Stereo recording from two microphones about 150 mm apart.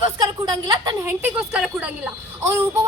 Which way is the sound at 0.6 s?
30° right (ahead or behind).